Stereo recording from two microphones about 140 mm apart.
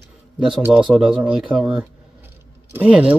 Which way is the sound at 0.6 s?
10° right (ahead or behind).